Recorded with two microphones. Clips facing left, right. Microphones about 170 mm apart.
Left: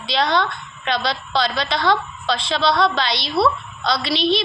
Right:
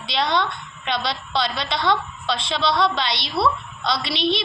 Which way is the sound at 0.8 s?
90° left.